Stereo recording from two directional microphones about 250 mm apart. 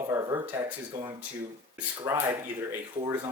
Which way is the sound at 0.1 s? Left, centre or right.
Centre.